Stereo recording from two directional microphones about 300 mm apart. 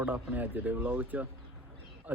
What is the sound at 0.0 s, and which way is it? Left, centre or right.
A man's voice, centre.